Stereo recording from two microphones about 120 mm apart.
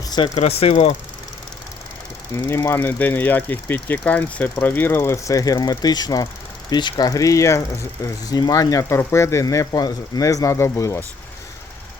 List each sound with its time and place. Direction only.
0.3 s speech: 65° left (ahead or behind)
2.3 s speech: 20° left (ahead or behind)